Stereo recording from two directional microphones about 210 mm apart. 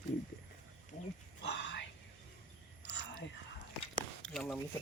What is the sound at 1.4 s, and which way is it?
Whispering, 55° left (ahead or behind).